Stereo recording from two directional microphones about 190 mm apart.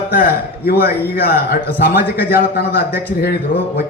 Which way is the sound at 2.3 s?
55° left (ahead or behind).